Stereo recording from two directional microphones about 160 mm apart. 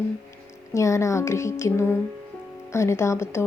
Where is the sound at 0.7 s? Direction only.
20° left (ahead or behind).